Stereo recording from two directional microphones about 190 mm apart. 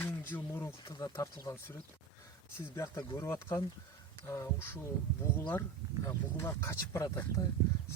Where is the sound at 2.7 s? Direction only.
20° left (ahead or behind).